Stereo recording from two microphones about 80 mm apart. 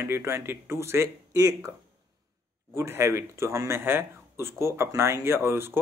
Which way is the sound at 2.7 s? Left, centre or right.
Right.